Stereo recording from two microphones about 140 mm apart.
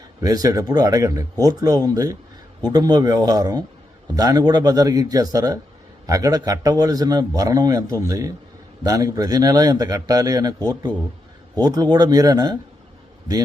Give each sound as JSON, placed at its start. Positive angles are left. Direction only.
{"t": 0.2, "sound": "a man's voice", "side_deg": -25}
{"t": 11.5, "sound": "a man's voice", "side_deg": -25}